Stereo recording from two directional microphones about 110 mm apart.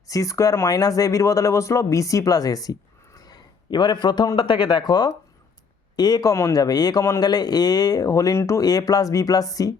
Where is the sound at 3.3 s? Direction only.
40° left (ahead or behind).